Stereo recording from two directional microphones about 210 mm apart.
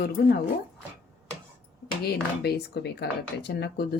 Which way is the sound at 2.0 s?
50° left (ahead or behind).